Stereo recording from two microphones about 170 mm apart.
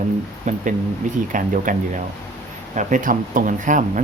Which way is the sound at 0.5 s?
45° right (ahead or behind).